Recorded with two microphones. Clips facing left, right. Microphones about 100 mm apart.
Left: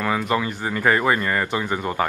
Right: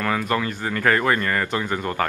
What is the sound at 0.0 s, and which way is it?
Speech, 10° left (ahead or behind).